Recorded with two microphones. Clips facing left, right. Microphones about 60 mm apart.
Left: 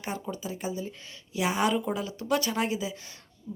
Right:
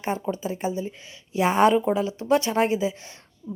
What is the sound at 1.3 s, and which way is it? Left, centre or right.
Speech, right.